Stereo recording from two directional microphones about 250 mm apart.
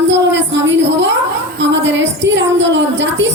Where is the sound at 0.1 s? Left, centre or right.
Right.